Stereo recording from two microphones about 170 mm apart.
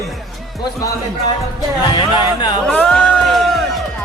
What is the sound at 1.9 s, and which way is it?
Speech, 25° left (ahead or behind).